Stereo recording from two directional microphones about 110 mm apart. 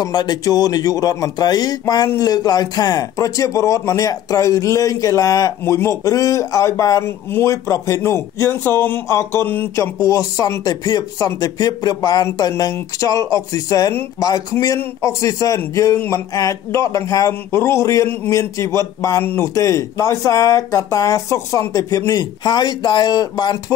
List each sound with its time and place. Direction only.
0.0 s speech: 40° left (ahead or behind)